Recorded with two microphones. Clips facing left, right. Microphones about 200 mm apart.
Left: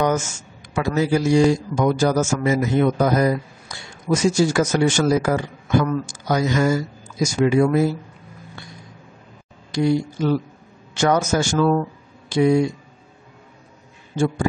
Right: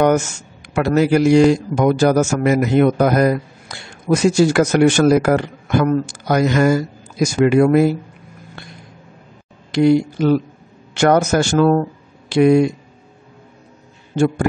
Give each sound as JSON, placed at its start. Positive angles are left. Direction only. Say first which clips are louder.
{"t": 0.7, "sound": "a man's voice", "louder": "right 5 dB", "side_deg": -70}
{"t": 9.8, "sound": "a man's voice", "louder": "right 6 dB", "side_deg": -70}